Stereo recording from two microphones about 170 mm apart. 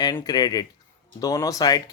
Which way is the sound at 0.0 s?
25° left (ahead or behind).